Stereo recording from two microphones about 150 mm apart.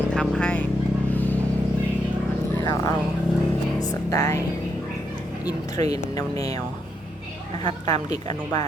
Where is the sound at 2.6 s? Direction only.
25° left (ahead or behind).